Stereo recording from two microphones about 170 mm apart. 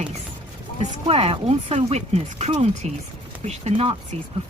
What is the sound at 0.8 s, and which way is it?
Speech, 35° right (ahead or behind).